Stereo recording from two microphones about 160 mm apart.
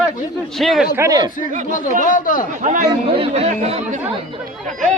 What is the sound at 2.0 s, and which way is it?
Speech, 55° left (ahead or behind).